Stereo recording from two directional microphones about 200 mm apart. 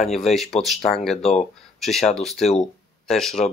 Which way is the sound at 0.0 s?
Centre (ahead or behind).